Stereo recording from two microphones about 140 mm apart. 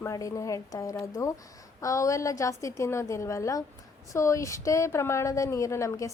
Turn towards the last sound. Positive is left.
turn(degrees=20)  # may be behind; listen again after turning